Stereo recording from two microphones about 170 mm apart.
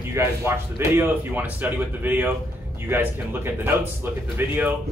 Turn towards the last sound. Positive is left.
turn(degrees=-10)  # may be behind; listen again after turning